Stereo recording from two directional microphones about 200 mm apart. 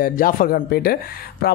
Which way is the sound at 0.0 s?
45° left (ahead or behind).